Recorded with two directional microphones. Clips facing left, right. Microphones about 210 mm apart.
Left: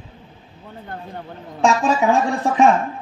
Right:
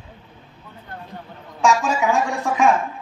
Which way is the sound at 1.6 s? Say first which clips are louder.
Left 2 dB; 35° left (ahead or behind).